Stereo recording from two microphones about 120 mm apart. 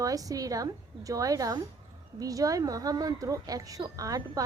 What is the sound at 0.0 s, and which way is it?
A woman's voice, 30° right (ahead or behind).